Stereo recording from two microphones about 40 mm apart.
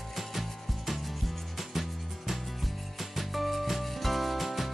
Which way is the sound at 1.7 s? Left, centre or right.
Centre.